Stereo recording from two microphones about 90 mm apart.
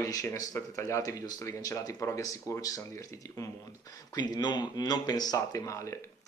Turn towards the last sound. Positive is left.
turn(degrees=35)  # may be behind; listen again after turning